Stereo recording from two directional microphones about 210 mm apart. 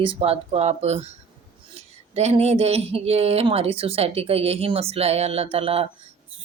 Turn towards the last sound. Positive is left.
turn(degrees=-30)  # may be behind; listen again after turning